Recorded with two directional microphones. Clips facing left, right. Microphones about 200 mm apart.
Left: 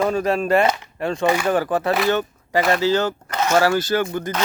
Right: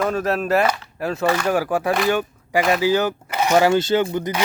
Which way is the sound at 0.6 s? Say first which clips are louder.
Left 1 dB; 25° left (ahead or behind).